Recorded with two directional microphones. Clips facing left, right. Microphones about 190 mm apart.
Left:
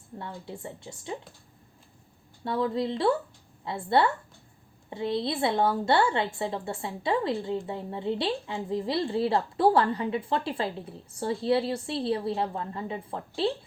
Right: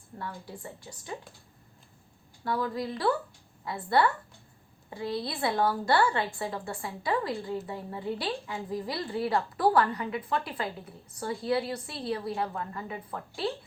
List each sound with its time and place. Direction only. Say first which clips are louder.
0.2 s a woman's voice: left 1 dB; 25° left (ahead or behind)
2.4 s a woman's voice: left 3 dB; 25° left (ahead or behind)